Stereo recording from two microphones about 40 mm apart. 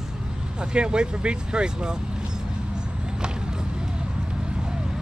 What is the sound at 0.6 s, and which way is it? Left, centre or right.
Speech, right.